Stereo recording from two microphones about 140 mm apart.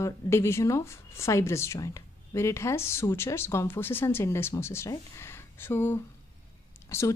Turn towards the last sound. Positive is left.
turn(degrees=20)  # may be behind; listen again after turning